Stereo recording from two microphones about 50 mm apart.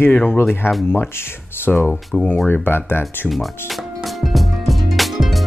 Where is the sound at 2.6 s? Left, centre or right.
Left.